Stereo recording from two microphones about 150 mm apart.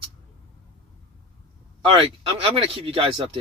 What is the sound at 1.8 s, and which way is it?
Speech, 35° right (ahead or behind).